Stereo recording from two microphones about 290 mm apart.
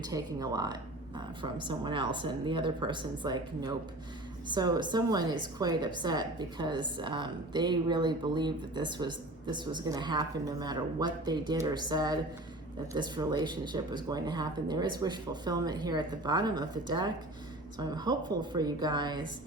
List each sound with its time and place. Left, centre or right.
0.0 s a woman's voice: centre